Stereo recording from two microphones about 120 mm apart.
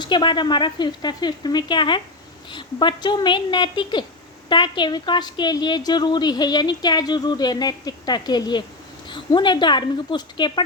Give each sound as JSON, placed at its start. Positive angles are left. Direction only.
{"t": 0.0, "sound": "a woman's voice", "side_deg": 40}